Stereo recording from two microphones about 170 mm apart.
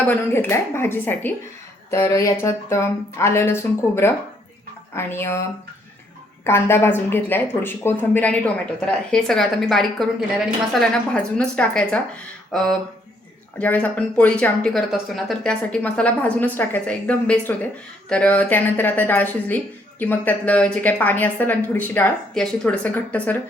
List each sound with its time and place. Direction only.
0.1 s a woman's voice: 15° left (ahead or behind)